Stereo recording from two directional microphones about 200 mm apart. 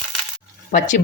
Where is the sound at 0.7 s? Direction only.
40° left (ahead or behind).